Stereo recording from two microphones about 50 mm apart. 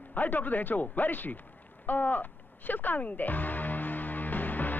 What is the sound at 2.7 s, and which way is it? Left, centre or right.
Music, left.